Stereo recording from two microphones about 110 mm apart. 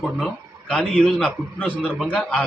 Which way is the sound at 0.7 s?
5° left (ahead or behind).